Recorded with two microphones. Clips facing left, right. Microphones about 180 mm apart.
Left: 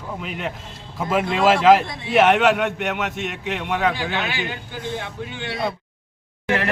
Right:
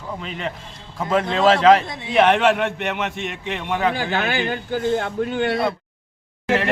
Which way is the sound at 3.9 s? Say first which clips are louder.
Right 3 dB; 45° right (ahead or behind).